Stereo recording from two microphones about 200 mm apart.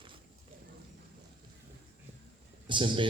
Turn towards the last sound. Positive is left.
turn(degrees=-25)  # may be behind; listen again after turning